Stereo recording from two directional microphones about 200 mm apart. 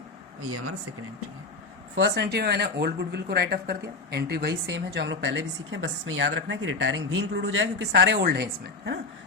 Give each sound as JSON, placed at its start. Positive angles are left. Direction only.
{"t": 2.0, "sound": "speech", "side_deg": -60}